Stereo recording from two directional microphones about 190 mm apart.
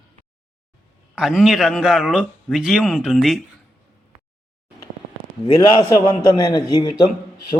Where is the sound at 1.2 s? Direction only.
Centre (ahead or behind).